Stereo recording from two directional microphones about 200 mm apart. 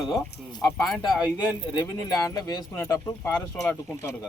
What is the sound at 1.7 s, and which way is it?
Speech, 20° left (ahead or behind).